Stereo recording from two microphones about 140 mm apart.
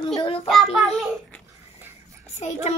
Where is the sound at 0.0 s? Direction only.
35° left (ahead or behind).